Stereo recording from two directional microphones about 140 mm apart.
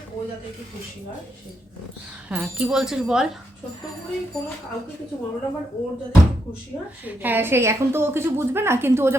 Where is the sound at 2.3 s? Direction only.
10° right (ahead or behind).